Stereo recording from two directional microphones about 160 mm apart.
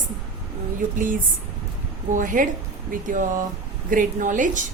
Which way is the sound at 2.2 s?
55° right (ahead or behind).